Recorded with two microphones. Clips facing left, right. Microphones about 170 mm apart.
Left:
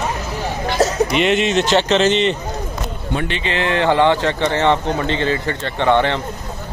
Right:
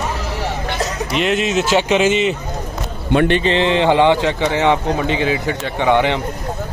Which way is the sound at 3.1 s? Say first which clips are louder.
Right 9 dB; 60° right (ahead or behind).